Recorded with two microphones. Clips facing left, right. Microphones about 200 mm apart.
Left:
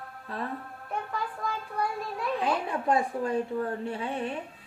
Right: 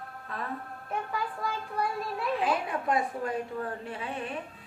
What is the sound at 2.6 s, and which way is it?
A woman's voice, 30° left (ahead or behind).